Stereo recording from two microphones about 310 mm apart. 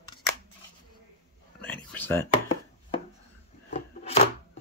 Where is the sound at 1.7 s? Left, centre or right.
Centre.